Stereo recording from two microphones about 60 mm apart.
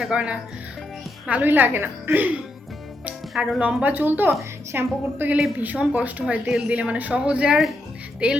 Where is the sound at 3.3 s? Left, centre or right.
Right.